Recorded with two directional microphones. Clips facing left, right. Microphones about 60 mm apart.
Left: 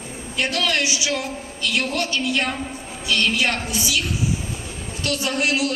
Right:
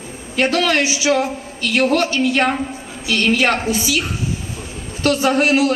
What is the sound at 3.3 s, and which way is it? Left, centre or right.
Speech, right.